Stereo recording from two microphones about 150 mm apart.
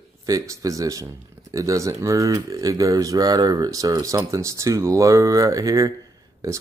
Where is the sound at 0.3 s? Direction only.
25° right (ahead or behind).